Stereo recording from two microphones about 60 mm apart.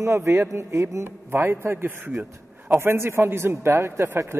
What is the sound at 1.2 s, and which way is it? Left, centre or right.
A man's voice, right.